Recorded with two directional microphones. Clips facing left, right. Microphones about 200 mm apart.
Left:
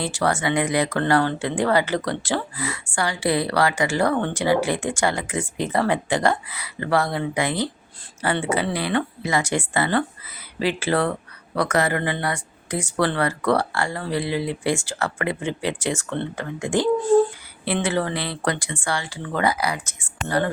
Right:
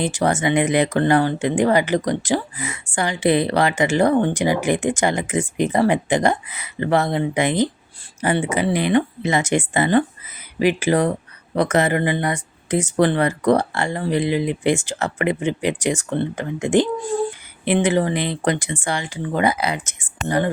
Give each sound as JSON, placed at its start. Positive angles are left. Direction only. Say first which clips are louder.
{"t": 0.0, "sound": "speech", "louder": "right 3 dB", "side_deg": -20}